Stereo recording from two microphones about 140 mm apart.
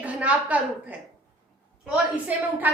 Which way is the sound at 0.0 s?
10° right (ahead or behind).